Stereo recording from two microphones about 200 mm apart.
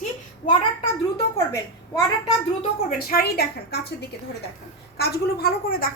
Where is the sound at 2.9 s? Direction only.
50° left (ahead or behind).